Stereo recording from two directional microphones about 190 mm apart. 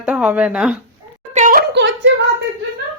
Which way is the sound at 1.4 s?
45° right (ahead or behind).